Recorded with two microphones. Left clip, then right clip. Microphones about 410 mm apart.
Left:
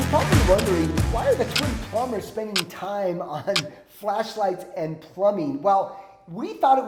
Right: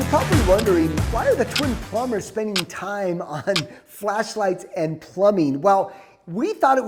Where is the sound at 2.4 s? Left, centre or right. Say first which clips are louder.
Right 2 dB; right.